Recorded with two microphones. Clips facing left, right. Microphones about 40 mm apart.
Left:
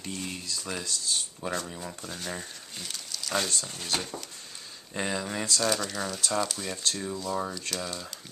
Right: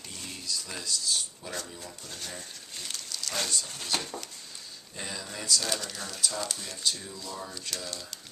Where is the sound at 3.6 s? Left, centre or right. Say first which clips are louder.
Left 2 dB; centre.